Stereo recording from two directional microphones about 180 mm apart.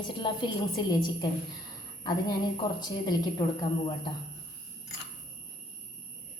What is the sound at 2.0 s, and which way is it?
A woman's voice, 25° left (ahead or behind).